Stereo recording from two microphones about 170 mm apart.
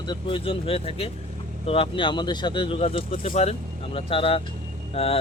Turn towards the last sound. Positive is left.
turn(degrees=35)  # may be behind; listen again after turning